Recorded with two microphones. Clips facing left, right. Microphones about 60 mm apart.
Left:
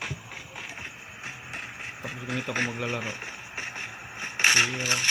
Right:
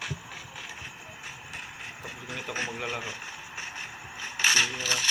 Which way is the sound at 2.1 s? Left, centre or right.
Left.